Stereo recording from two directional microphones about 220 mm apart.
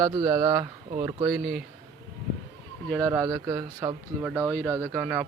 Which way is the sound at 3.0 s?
10° right (ahead or behind).